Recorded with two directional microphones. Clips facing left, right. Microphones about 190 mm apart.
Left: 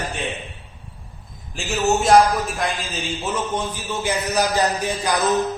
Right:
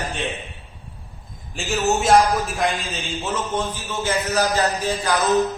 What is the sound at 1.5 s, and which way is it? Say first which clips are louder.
A man's voice: left 1 dB; centre (ahead or behind).